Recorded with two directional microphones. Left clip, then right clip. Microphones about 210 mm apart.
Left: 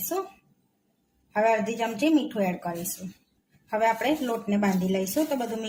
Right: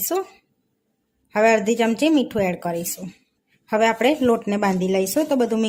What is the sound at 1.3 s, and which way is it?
A woman's voice, 45° right (ahead or behind).